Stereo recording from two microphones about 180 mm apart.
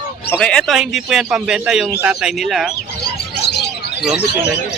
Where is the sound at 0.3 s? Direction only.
5° left (ahead or behind).